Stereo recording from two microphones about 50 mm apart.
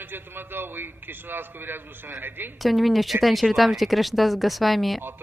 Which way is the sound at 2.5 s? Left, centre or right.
Centre.